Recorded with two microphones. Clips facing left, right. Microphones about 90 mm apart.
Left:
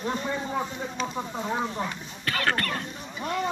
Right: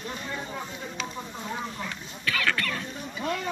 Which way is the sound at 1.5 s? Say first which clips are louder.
Left 5 dB; 30° left (ahead or behind).